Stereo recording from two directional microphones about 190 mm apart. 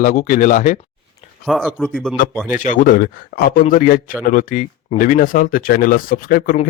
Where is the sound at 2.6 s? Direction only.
40° left (ahead or behind).